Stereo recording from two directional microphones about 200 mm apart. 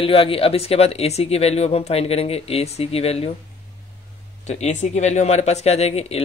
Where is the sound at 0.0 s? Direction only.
25° left (ahead or behind).